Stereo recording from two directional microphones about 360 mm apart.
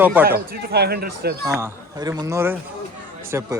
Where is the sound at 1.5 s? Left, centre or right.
Centre.